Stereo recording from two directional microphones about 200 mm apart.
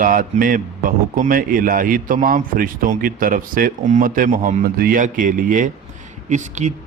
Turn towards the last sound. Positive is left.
turn(degrees=-35)  # may be behind; listen again after turning